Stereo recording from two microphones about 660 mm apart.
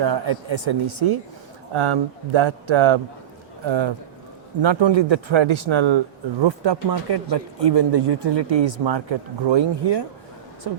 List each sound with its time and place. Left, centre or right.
0.0 s speech: right